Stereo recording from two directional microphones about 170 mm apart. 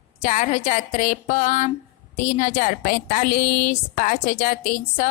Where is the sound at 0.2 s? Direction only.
45° left (ahead or behind).